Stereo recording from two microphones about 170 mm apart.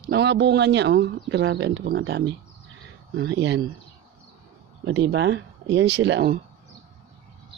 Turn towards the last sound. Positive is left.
turn(degrees=-80)